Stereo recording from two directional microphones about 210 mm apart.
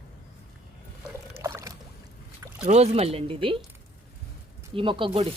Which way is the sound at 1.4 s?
15° right (ahead or behind).